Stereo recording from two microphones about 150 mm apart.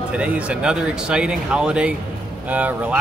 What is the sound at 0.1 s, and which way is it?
Speech, 10° right (ahead or behind).